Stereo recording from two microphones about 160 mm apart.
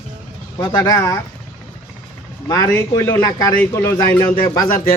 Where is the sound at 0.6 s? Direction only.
25° left (ahead or behind).